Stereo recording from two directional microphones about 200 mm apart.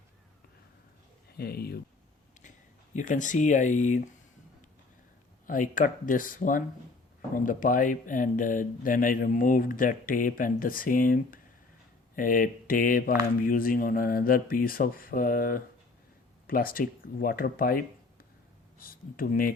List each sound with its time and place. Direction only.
1.4 s speech: 50° left (ahead or behind)
2.9 s speech: 40° left (ahead or behind)
5.5 s speech: 40° left (ahead or behind)